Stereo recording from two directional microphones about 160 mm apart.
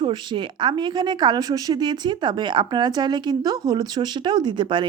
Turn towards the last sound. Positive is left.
turn(degrees=-30)  # may be behind; listen again after turning